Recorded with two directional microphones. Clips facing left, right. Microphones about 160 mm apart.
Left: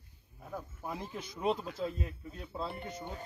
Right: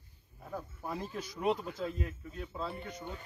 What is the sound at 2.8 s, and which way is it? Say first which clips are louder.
Speech: left 1 dB; 35° left (ahead or behind).